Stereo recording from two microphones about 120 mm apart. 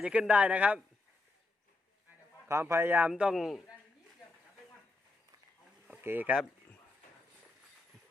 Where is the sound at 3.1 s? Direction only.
5° right (ahead or behind).